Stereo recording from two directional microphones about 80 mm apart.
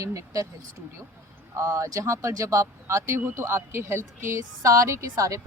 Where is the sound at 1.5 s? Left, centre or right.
Right.